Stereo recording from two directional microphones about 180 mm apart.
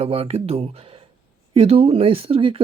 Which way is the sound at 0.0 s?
35° right (ahead or behind).